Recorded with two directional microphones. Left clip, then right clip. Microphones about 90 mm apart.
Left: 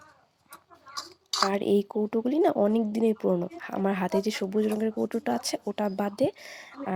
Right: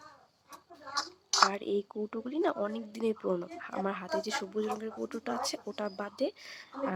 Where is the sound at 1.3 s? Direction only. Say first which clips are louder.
Even; 35° left (ahead or behind).